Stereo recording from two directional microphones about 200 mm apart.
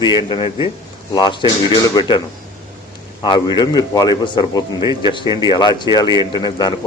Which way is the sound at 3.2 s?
20° left (ahead or behind).